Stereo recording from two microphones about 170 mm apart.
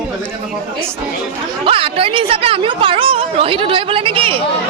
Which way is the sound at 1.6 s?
35° right (ahead or behind).